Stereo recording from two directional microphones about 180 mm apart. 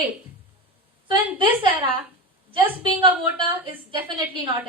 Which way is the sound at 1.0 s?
25° right (ahead or behind).